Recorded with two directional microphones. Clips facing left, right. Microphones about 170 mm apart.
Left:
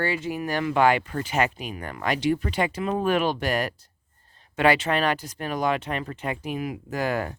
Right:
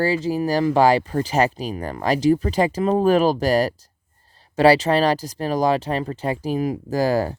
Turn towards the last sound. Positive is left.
turn(degrees=-35)  # may be behind; listen again after turning